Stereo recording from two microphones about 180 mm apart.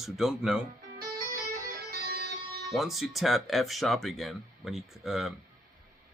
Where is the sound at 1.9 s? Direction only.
60° right (ahead or behind).